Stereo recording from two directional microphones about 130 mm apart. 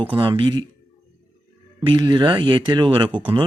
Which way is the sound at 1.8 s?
40° right (ahead or behind).